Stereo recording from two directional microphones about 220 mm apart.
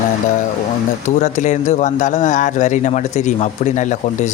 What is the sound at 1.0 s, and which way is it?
Speech, 35° left (ahead or behind).